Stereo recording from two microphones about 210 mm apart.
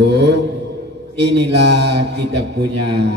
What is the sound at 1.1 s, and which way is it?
A man's voice, 55° right (ahead or behind).